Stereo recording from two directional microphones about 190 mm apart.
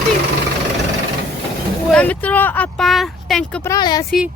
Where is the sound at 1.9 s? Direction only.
5° left (ahead or behind).